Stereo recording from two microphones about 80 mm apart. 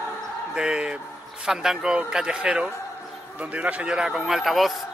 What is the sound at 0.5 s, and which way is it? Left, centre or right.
A man's voice, centre.